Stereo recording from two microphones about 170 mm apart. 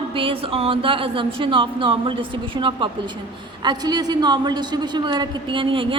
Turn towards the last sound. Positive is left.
turn(degrees=-30)  # may be behind; listen again after turning